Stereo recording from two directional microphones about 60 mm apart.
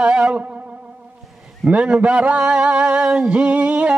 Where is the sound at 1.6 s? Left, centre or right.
Centre.